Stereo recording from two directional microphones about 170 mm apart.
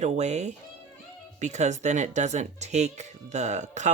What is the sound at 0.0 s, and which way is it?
Speech, 40° right (ahead or behind).